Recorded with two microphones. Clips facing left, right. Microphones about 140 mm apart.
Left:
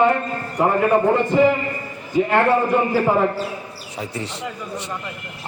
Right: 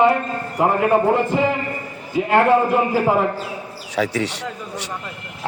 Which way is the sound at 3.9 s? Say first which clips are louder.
Right 8 dB; 80° right.